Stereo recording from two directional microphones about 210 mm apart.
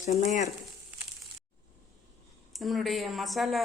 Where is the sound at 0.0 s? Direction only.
35° left (ahead or behind).